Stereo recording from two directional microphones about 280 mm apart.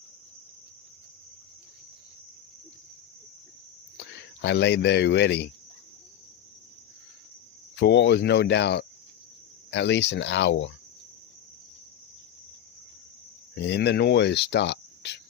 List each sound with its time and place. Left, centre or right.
3.9 s speech: left
7.8 s speech: left
13.6 s speech: left